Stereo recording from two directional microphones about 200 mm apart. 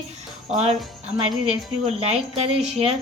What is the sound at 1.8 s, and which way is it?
A woman's voice, 30° right (ahead or behind).